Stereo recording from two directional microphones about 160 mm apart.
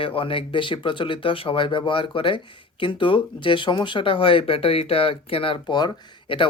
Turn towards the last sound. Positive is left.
turn(degrees=30)  # may be behind; listen again after turning